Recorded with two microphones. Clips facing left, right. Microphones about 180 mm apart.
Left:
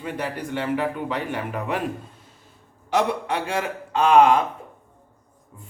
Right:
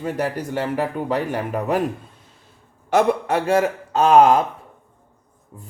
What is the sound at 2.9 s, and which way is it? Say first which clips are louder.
A man's voice: right 5 dB; 50° right (ahead or behind).